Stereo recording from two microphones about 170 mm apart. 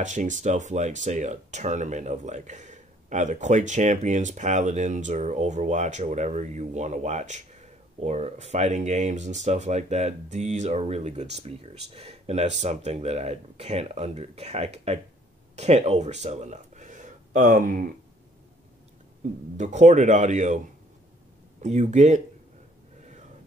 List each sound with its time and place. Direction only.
0.0 s speech: 45° right (ahead or behind)
19.5 s speech: 45° right (ahead or behind)